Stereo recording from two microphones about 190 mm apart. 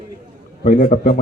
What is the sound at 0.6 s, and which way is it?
Speech, 40° left (ahead or behind).